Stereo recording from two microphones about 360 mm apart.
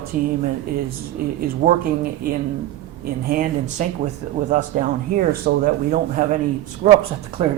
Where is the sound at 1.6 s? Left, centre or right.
Centre.